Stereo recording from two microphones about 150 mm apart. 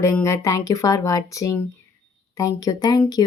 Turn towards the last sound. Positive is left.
turn(degrees=25)  # may be behind; listen again after turning